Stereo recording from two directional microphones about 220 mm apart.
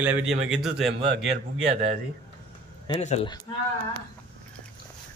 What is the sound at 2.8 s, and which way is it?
Speech, 25° left (ahead or behind).